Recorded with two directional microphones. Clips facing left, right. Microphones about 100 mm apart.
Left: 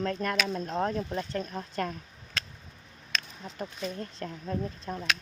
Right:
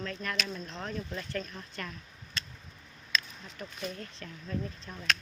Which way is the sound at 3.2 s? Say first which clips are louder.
Left 6 dB; 35° left (ahead or behind).